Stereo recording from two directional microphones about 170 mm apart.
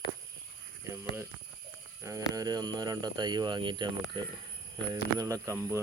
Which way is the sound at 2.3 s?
25° right (ahead or behind).